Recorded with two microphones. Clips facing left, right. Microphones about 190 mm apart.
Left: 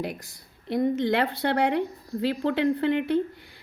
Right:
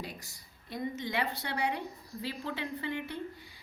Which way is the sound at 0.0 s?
60° left (ahead or behind).